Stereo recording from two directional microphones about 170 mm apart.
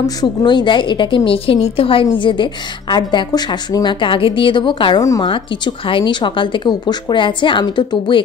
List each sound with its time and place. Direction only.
0.0 s a woman's voice: 25° left (ahead or behind)
5.0 s a woman's voice: 20° left (ahead or behind)